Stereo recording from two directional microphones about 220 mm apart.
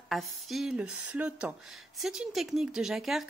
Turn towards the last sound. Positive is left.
turn(degrees=0)  # may be behind; listen again after turning